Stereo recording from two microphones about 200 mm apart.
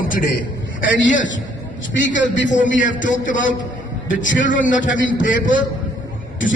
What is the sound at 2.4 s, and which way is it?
A man's voice, 40° left (ahead or behind).